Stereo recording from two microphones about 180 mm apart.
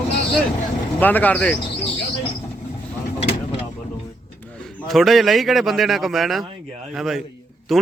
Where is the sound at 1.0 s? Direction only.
10° left (ahead or behind).